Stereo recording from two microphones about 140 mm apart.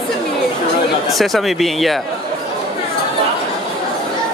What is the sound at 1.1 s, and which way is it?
Speech, centre (ahead or behind).